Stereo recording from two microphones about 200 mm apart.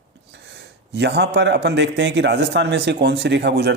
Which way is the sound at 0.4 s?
60° right (ahead or behind).